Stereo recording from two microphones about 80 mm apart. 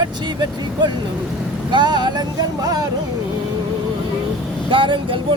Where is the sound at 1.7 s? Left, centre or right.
Right.